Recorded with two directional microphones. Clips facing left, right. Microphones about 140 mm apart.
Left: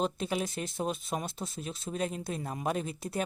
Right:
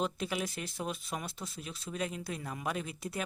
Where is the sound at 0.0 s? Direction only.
30° left (ahead or behind).